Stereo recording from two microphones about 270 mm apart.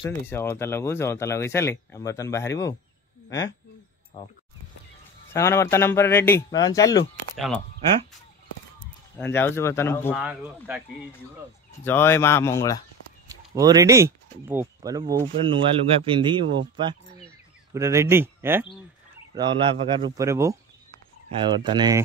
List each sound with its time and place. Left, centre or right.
0.3 s speech: centre
5.3 s speech: centre
7.3 s speech: centre
9.1 s speech: centre
10.1 s speech: centre
11.8 s speech: centre
13.6 s speech: centre